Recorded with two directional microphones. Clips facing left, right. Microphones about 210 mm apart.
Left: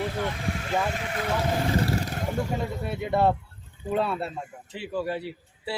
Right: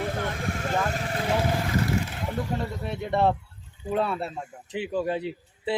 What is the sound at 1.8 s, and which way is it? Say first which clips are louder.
Vehicle: even; 40° left (ahead or behind).